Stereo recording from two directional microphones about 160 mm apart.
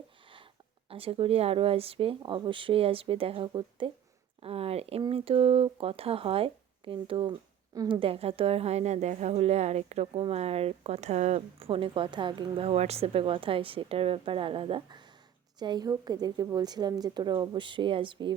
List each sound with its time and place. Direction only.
0.9 s a woman's voice: 35° right (ahead or behind)